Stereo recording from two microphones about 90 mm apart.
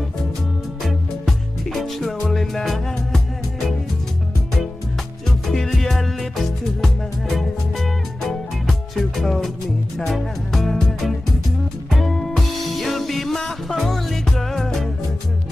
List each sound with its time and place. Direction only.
0.8 s music: centre (ahead or behind)
5.5 s music: 5° left (ahead or behind)